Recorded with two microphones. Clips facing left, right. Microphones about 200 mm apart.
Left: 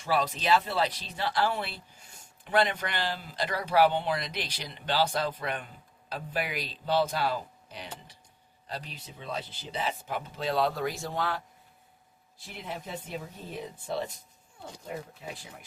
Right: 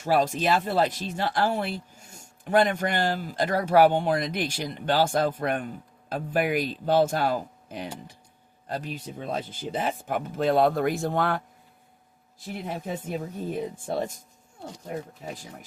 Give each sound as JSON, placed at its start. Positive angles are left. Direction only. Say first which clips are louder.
{"t": 0.0, "sound": "speech", "louder": "right 6 dB", "side_deg": -45}
{"t": 12.5, "sound": "speech", "louder": "right 6 dB", "side_deg": -45}
{"t": 15.2, "sound": "speech", "louder": "right 4 dB", "side_deg": -40}